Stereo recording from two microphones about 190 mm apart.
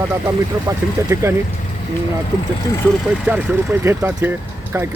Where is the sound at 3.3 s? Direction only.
15° right (ahead or behind).